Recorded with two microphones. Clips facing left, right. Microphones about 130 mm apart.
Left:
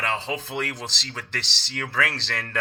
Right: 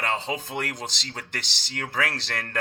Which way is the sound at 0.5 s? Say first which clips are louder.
Left 1 dB; 45° right (ahead or behind).